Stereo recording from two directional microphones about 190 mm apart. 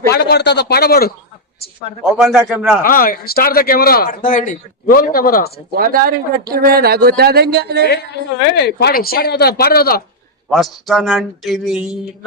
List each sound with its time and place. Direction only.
0.1 s speech: 60° left (ahead or behind)
2.1 s speech: 5° right (ahead or behind)
2.8 s speech: 50° left (ahead or behind)
5.7 s speech: 50° right (ahead or behind)
7.9 s speech: 60° left (ahead or behind)
10.5 s speech: centre (ahead or behind)